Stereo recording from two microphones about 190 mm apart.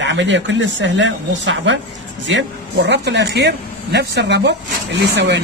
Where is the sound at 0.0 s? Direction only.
70° right (ahead or behind).